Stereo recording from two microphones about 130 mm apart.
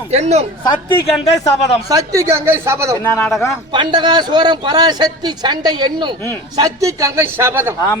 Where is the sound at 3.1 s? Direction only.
20° left (ahead or behind).